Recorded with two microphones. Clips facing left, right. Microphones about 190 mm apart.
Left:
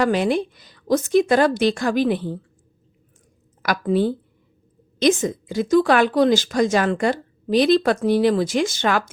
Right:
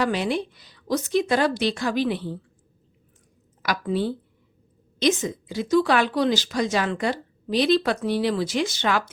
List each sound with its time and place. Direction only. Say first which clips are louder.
0.0 s speech: left 5 dB; 50° left (ahead or behind)
3.6 s speech: left 5 dB; 50° left (ahead or behind)